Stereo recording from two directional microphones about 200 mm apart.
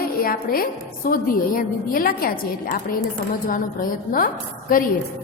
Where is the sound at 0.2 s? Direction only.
45° left (ahead or behind).